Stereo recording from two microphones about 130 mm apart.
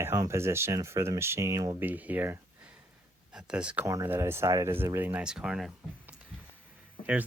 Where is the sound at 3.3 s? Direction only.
10° right (ahead or behind).